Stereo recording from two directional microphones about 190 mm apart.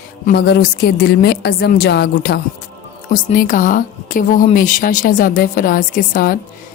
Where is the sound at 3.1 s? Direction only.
45° left (ahead or behind).